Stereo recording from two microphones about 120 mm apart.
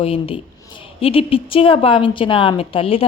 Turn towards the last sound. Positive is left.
turn(degrees=50)  # may be behind; listen again after turning